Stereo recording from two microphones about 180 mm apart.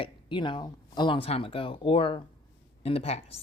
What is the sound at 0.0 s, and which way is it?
A woman's voice, 25° left (ahead or behind).